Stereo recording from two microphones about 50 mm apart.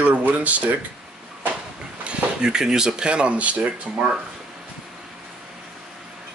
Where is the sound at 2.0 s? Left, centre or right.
Centre.